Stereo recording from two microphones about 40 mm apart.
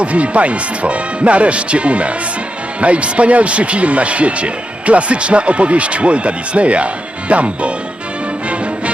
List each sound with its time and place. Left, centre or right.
0.0 s a man's voice: right